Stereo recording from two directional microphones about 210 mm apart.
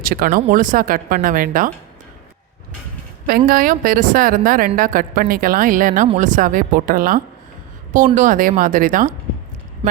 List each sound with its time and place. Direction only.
0.0 s a woman's voice: 45° right (ahead or behind)
3.2 s a woman's voice: 45° right (ahead or behind)
9.8 s speech: 25° right (ahead or behind)